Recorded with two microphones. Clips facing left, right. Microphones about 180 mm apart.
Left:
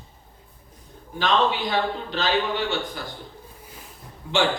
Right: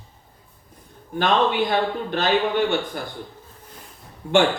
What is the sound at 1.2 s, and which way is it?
Speech, 55° right (ahead or behind).